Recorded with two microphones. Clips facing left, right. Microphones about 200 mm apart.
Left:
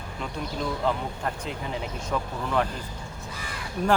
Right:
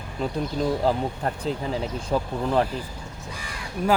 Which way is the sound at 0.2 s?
35° right (ahead or behind).